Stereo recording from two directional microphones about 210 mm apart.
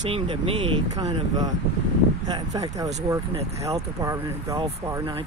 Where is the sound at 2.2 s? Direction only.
20° right (ahead or behind).